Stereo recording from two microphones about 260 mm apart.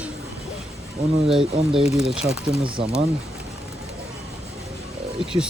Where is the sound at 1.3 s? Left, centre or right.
Centre.